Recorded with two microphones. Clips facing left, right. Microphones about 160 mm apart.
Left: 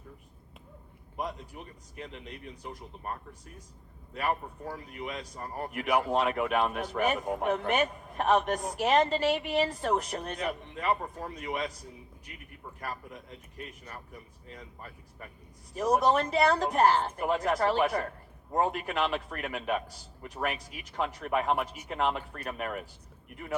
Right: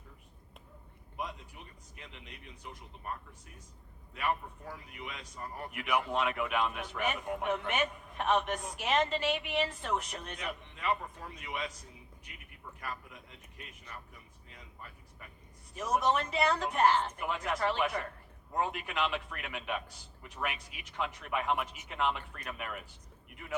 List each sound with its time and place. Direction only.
1.1 s speech: 40° left (ahead or behind)